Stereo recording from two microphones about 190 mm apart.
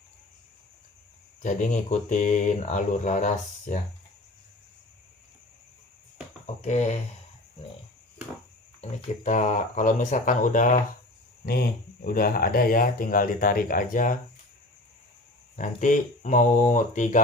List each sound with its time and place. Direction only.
1.4 s speech: 40° left (ahead or behind)
6.6 s speech: 35° left (ahead or behind)
8.8 s speech: 40° left (ahead or behind)
15.5 s speech: 40° left (ahead or behind)